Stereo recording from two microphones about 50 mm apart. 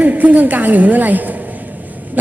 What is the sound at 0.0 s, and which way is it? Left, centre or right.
A woman's voice, right.